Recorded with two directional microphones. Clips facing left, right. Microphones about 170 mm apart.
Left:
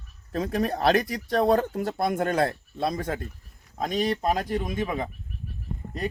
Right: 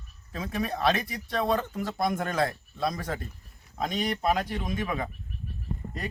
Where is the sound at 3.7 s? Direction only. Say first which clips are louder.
Left 4 dB; 40° left (ahead or behind).